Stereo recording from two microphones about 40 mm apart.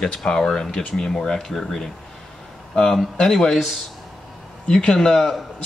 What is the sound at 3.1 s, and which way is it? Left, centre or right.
Speech, centre.